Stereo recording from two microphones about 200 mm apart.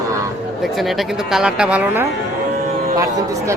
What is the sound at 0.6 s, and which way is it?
A man's voice, centre (ahead or behind).